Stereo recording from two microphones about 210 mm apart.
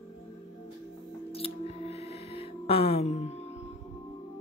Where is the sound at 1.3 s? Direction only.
30° left (ahead or behind).